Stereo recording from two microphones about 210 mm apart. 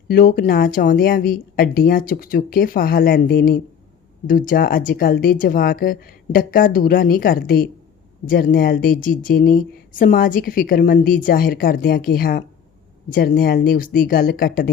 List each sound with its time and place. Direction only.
0.1 s speech: 45° left (ahead or behind)